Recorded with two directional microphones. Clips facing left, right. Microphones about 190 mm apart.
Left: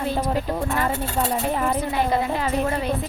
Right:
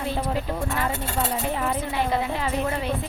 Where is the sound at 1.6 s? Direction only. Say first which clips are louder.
Left 3 dB; 40° left (ahead or behind).